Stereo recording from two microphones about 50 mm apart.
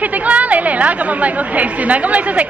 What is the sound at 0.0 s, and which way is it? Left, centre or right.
A woman's voice, right.